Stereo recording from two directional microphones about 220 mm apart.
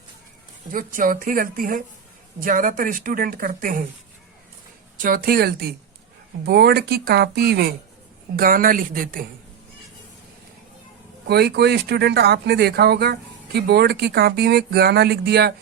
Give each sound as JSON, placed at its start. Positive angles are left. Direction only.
{"t": 0.7, "sound": "a woman's voice", "side_deg": -40}
{"t": 5.0, "sound": "a woman's voice", "side_deg": -40}
{"t": 11.3, "sound": "speech", "side_deg": -45}